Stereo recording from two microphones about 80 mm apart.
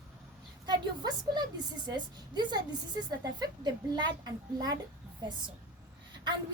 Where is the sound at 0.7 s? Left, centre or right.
Right.